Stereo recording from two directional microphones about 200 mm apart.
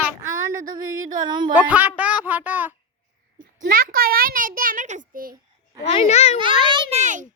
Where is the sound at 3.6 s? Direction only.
45° right (ahead or behind).